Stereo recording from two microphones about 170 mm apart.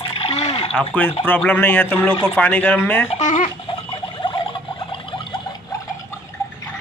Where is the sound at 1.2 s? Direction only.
10° left (ahead or behind).